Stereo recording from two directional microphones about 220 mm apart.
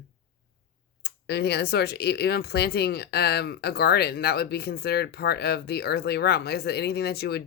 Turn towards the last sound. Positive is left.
turn(degrees=45)  # may be behind; listen again after turning